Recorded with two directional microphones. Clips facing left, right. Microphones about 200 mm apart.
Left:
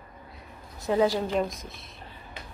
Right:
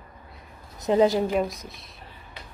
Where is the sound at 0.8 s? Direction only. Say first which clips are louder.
Right 4 dB; 20° right (ahead or behind).